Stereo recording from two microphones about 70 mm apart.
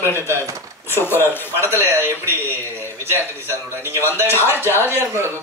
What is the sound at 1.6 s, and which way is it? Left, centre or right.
A man's voice, right.